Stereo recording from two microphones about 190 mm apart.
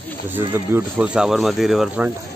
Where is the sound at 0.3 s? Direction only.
10° right (ahead or behind).